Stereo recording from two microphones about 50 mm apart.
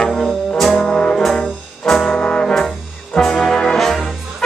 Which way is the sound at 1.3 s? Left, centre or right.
Centre.